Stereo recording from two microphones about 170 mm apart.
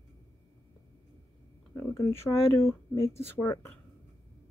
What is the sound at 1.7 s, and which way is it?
Speech, 15° left (ahead or behind).